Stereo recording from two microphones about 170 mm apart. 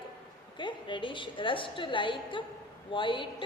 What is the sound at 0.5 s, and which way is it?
A woman's voice, 30° left (ahead or behind).